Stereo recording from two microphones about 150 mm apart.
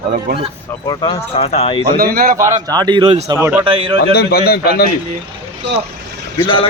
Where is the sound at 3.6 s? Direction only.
35° right (ahead or behind).